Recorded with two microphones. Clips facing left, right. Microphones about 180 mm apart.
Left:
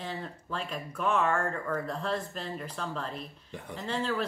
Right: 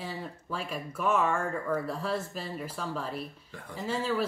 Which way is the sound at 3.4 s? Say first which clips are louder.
Left 3 dB; 20° left (ahead or behind).